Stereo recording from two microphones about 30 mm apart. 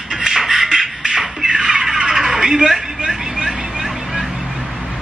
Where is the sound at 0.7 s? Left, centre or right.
Right.